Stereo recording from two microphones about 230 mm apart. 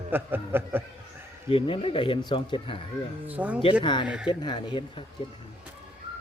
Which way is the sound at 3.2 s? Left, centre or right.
Centre.